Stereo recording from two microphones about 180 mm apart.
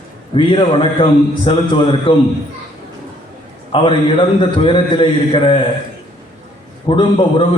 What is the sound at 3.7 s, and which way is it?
A man's voice, 30° left (ahead or behind).